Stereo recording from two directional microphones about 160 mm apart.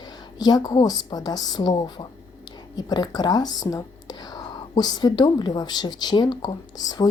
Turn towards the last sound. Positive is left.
turn(degrees=25)  # may be behind; listen again after turning